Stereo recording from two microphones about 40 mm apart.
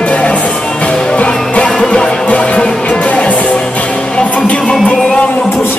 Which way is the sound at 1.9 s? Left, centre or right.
Left.